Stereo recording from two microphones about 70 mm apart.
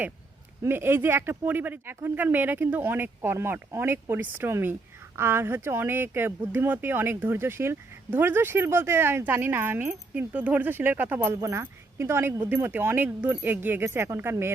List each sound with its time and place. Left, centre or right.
0.6 s a woman's voice: right